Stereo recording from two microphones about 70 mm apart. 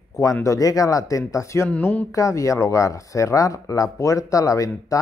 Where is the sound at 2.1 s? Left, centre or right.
Left.